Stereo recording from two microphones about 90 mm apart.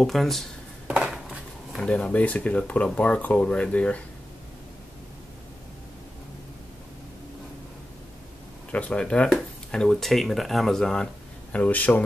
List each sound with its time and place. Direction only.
0.0 s speech: centre (ahead or behind)
0.8 s a sound: 10° right (ahead or behind)
1.8 s speech: 10° left (ahead or behind)
8.7 s speech: 15° left (ahead or behind)
11.5 s speech: 15° left (ahead or behind)